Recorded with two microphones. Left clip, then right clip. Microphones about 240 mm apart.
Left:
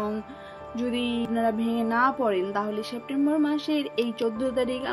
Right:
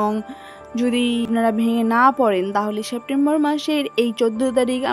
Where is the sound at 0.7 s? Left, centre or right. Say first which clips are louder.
Right 8 dB; right.